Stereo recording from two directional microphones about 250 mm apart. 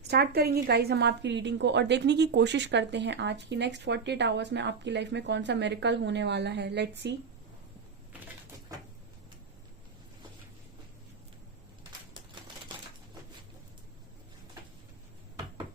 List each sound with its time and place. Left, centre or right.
0.1 s a woman's voice: right